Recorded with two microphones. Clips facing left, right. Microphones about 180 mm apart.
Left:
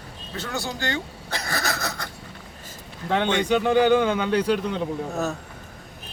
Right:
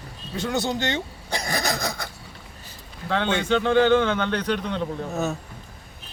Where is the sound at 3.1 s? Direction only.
15° left (ahead or behind).